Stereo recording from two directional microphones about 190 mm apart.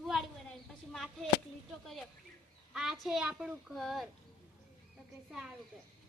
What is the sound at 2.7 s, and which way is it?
A woman's voice, centre (ahead or behind).